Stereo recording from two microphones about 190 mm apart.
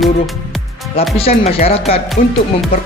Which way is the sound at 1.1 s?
30° left (ahead or behind).